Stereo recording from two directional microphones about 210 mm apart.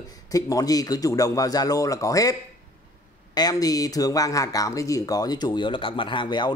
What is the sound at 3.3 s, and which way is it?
Speech, 20° left (ahead or behind).